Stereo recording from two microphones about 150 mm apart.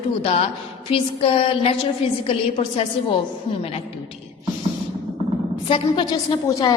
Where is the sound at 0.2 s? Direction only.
40° left (ahead or behind).